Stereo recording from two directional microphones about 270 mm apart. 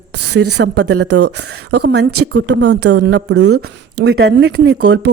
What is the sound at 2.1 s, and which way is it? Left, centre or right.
Speech, right.